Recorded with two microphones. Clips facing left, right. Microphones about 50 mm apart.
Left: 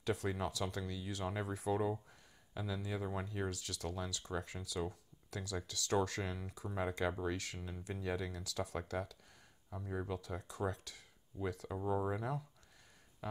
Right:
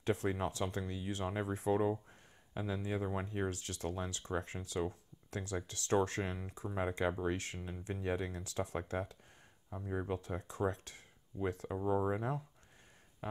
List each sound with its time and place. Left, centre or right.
0.0 s speech: right
9.7 s speech: centre
10.0 s speech: right
13.2 s music: right